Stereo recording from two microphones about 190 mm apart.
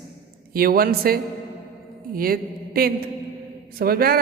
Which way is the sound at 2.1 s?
50° right (ahead or behind).